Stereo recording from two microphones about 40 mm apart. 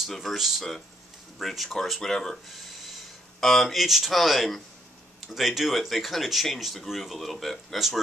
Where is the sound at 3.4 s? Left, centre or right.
Centre.